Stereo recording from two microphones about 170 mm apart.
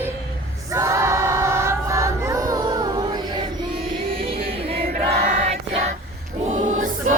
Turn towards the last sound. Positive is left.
turn(degrees=-45)  # may be behind; listen again after turning